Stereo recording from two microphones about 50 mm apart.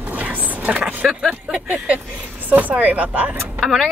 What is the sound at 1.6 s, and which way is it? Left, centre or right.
Speech, right.